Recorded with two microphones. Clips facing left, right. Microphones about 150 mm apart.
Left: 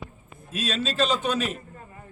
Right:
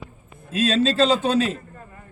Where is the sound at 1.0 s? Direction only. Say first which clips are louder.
Right 6 dB; 30° right (ahead or behind).